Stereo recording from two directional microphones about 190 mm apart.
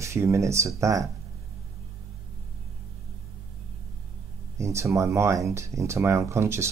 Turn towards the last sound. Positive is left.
turn(degrees=-15)  # may be behind; listen again after turning